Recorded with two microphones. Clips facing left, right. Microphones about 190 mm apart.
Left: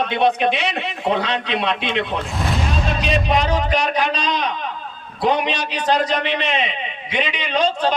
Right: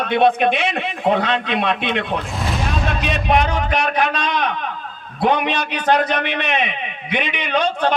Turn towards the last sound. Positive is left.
turn(degrees=-55)  # may be behind; listen again after turning